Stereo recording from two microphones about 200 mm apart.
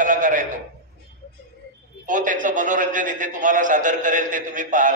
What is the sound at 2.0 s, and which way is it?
A man's voice, 40° right (ahead or behind).